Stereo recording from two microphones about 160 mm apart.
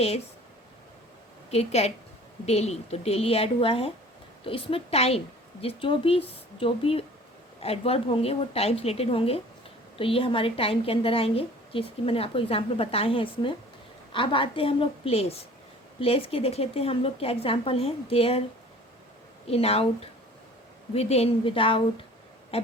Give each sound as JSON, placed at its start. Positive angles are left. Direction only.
{"t": 1.5, "sound": "a woman's voice", "side_deg": 40}
{"t": 19.5, "sound": "a woman's voice", "side_deg": 40}